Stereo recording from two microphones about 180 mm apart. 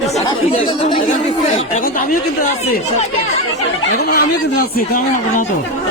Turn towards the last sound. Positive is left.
turn(degrees=55)  # may be behind; listen again after turning